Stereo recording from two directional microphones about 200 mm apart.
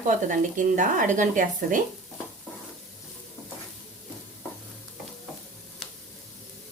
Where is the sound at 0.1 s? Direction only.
40° right (ahead or behind).